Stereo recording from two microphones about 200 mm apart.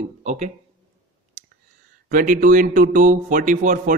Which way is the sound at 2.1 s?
40° right (ahead or behind).